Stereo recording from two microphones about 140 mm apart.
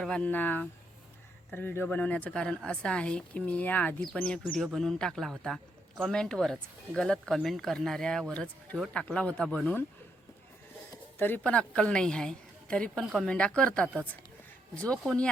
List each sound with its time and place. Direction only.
0.0 s speech: 10° left (ahead or behind)
11.2 s speech: 10° left (ahead or behind)
15.0 s speech: 5° left (ahead or behind)